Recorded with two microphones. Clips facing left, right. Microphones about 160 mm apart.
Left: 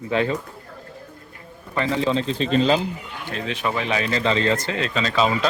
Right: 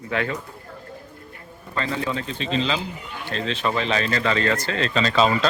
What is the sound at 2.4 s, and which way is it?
Speech, 45° left (ahead or behind).